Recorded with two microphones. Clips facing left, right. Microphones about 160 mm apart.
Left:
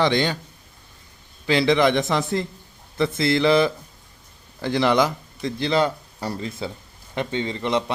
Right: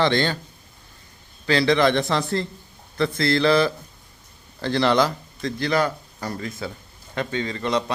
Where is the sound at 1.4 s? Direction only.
20° left (ahead or behind).